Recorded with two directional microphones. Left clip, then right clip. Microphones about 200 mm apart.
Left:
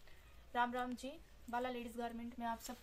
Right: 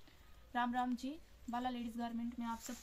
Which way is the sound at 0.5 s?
45° left (ahead or behind).